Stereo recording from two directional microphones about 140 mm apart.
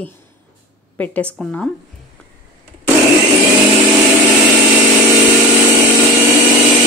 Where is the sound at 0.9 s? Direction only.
10° left (ahead or behind).